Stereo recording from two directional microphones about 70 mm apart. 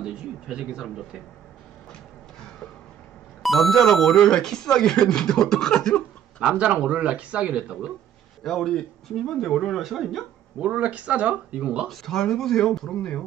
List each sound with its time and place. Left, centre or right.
0.0 s speech: centre
3.4 s speech: centre
6.5 s speech: centre
8.5 s speech: centre
10.6 s speech: centre
11.9 s speech: centre